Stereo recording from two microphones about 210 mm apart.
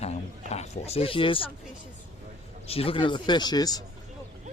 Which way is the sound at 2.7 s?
25° left (ahead or behind).